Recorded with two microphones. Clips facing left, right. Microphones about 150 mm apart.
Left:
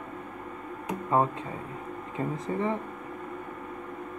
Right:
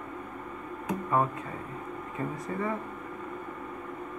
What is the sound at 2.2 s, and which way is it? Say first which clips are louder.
Speech: left 3 dB; 25° left (ahead or behind).